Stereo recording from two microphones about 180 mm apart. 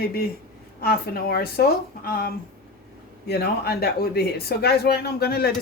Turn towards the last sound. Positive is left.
turn(degrees=55)  # may be behind; listen again after turning